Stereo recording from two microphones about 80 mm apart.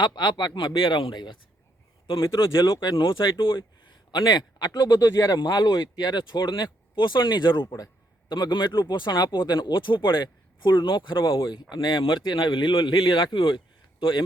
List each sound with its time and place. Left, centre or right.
0.0 s speech: left
2.6 s speech: left
3.0 s speech: left
4.1 s speech: left
5.4 s speech: left
11.7 s speech: left